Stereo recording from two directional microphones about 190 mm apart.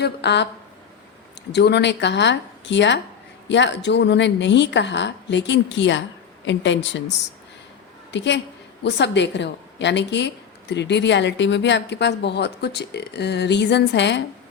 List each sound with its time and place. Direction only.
0.0 s a woman's voice: 65° left (ahead or behind)
1.5 s a woman's voice: 60° left (ahead or behind)
8.1 s a woman's voice: 65° left (ahead or behind)